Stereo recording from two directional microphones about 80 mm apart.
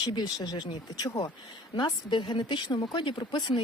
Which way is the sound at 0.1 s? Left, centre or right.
Left.